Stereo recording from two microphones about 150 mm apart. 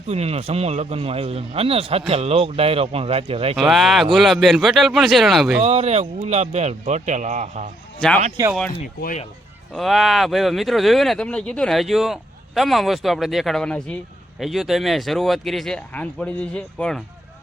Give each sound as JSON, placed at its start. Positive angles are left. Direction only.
{"t": 0.1, "sound": "a man's voice", "side_deg": -45}
{"t": 3.6, "sound": "speech", "side_deg": 0}
{"t": 5.5, "sound": "speech", "side_deg": -45}
{"t": 8.4, "sound": "speech", "side_deg": -25}
{"t": 9.7, "sound": "speech", "side_deg": 0}